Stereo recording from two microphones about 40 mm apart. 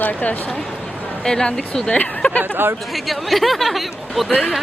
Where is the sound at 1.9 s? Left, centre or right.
Left.